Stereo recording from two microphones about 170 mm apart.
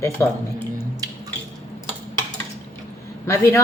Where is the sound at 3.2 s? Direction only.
15° left (ahead or behind).